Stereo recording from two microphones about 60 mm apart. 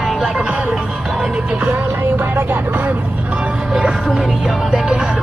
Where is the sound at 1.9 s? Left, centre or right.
Right.